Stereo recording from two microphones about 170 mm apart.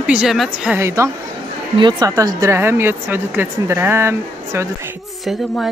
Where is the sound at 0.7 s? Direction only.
15° right (ahead or behind).